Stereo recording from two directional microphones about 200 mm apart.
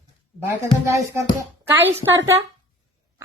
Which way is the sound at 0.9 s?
15° right (ahead or behind).